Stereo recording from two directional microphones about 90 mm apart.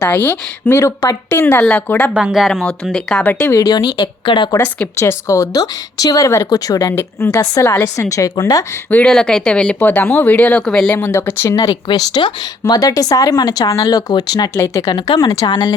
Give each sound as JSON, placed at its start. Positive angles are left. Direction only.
{"t": 0.0, "sound": "a woman's voice", "side_deg": 20}
{"t": 0.8, "sound": "a woman's voice", "side_deg": 35}
{"t": 2.1, "sound": "speech", "side_deg": -5}
{"t": 2.5, "sound": "speech", "side_deg": 5}
{"t": 3.2, "sound": "a woman's voice", "side_deg": 20}
{"t": 3.5, "sound": "speech", "side_deg": 45}
{"t": 4.9, "sound": "a woman's voice", "side_deg": 35}
{"t": 6.9, "sound": "a woman's voice", "side_deg": 30}
{"t": 8.1, "sound": "a woman's voice", "side_deg": 40}
{"t": 8.9, "sound": "a woman's voice", "side_deg": 15}
{"t": 11.5, "sound": "speech", "side_deg": 50}
{"t": 14.6, "sound": "a woman's voice", "side_deg": 35}
{"t": 14.8, "sound": "speech", "side_deg": 55}